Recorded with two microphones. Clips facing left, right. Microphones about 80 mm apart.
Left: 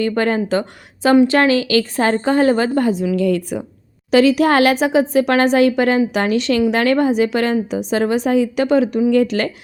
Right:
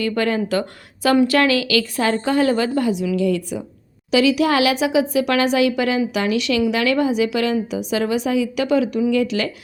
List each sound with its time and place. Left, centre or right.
0.0 s a woman's voice: left
3.2 s a woman's voice: left